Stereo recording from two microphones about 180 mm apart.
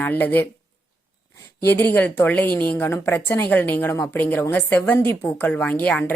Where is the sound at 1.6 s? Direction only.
10° left (ahead or behind).